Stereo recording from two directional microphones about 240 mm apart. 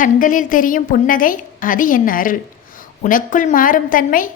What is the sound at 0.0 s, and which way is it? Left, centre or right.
A woman's voice, left.